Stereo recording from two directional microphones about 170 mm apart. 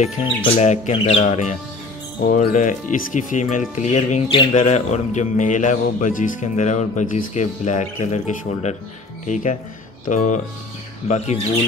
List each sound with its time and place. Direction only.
0.0 s speech: 35° left (ahead or behind)